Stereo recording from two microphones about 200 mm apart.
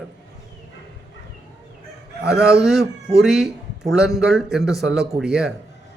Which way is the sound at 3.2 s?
Centre (ahead or behind).